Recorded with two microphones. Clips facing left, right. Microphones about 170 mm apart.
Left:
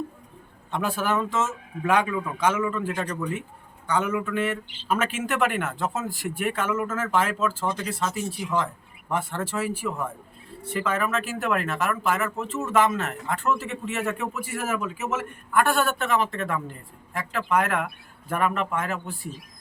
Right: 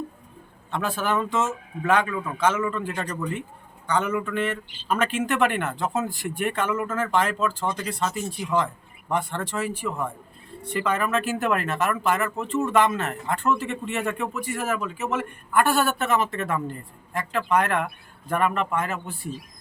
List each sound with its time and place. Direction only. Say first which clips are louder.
0.7 s speech: even; 10° left (ahead or behind)